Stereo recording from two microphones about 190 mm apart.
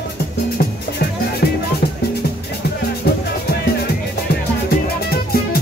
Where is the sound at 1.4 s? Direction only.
60° left (ahead or behind).